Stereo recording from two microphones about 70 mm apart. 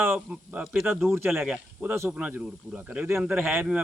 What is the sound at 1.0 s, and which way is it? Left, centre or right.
Speech, right.